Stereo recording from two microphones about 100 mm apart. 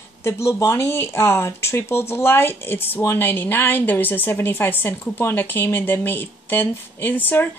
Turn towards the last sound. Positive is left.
turn(degrees=20)  # may be behind; listen again after turning